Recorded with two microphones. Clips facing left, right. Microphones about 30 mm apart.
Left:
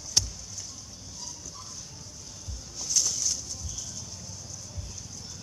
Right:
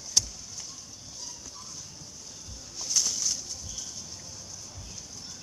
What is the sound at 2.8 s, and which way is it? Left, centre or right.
Bird flight, centre.